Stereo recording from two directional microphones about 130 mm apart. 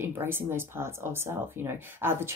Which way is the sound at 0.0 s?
15° right (ahead or behind).